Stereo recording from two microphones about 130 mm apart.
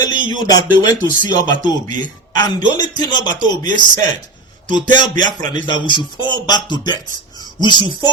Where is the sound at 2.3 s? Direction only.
35° left (ahead or behind).